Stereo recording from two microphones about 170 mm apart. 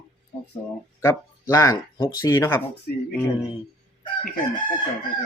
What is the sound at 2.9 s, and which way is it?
Speech, 55° left (ahead or behind).